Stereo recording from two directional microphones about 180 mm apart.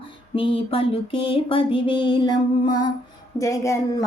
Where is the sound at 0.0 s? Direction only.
30° left (ahead or behind).